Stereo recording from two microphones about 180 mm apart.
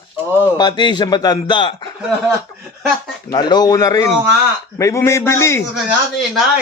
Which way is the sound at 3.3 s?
25° left (ahead or behind).